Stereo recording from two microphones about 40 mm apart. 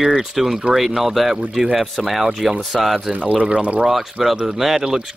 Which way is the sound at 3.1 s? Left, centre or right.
Right.